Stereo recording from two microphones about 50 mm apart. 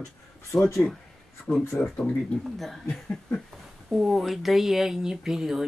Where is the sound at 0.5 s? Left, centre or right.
Centre.